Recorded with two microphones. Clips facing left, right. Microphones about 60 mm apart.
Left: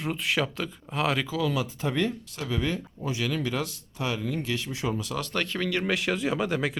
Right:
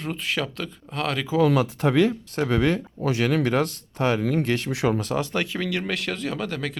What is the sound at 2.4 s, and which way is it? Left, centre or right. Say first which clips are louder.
Speech: right 6 dB; right.